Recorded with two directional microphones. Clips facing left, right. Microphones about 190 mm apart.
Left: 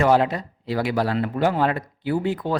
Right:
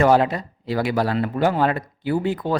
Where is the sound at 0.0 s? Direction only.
45° right (ahead or behind).